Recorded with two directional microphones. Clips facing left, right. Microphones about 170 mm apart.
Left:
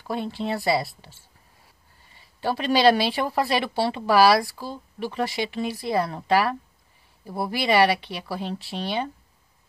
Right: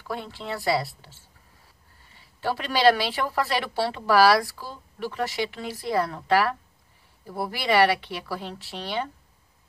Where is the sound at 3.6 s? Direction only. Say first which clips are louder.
Left 2 dB; 20° left (ahead or behind).